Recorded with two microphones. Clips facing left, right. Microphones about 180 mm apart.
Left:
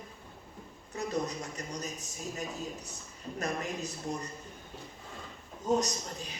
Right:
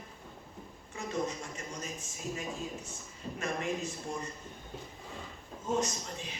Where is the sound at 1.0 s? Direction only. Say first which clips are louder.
Left 2 dB; 40° left (ahead or behind).